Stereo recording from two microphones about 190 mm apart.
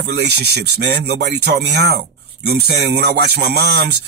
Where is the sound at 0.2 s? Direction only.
60° right (ahead or behind).